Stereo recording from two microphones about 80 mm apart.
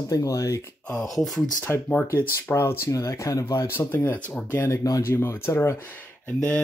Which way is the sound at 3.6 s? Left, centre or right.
Left.